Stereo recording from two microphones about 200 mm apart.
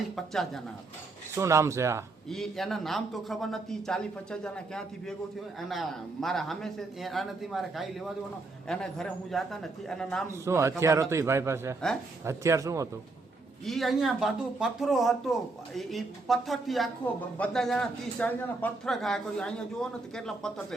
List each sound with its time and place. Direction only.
0.2 s speech: centre (ahead or behind)
1.4 s a man's voice: 15° right (ahead or behind)
2.3 s speech: centre (ahead or behind)
10.4 s a man's voice: 15° right (ahead or behind)
13.7 s speech: centre (ahead or behind)